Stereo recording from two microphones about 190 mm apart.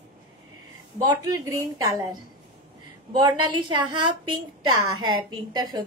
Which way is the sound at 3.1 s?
25° right (ahead or behind).